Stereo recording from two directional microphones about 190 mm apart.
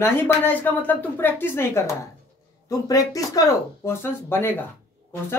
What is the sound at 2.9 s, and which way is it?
Speech, 15° left (ahead or behind).